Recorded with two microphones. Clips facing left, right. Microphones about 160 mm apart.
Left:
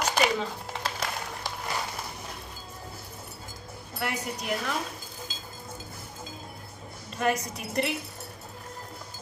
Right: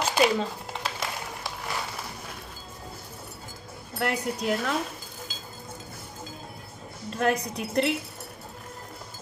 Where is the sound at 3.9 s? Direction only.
60° right (ahead or behind).